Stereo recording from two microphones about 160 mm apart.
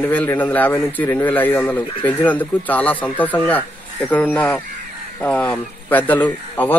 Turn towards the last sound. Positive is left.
turn(degrees=10)  # may be behind; listen again after turning